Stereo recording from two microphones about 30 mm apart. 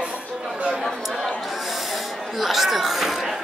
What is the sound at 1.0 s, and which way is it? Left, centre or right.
Snort, centre.